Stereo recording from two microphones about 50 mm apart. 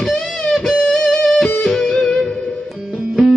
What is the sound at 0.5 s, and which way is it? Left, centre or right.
Music, centre.